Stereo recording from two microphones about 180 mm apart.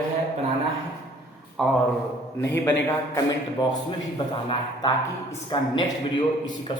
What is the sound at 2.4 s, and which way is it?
A man's voice, 10° left (ahead or behind).